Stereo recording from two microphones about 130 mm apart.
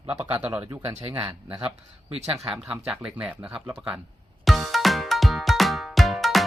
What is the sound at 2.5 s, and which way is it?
Speech, 10° right (ahead or behind).